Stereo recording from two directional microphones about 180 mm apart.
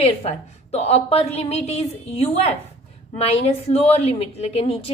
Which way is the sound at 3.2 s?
35° left (ahead or behind).